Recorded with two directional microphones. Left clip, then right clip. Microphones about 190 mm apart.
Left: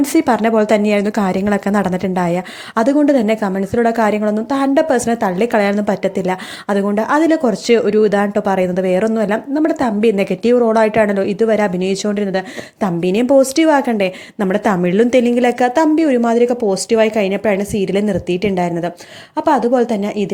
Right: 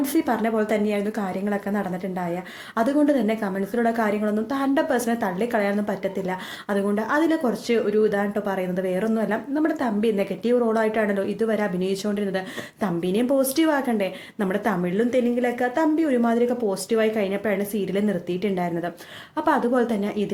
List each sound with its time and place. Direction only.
0.0 s a woman's voice: 45° left (ahead or behind)